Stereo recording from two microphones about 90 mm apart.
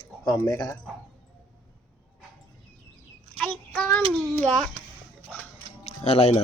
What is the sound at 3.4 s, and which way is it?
Child singing, 10° left (ahead or behind).